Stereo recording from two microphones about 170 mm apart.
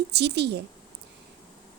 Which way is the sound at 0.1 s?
75° right (ahead or behind).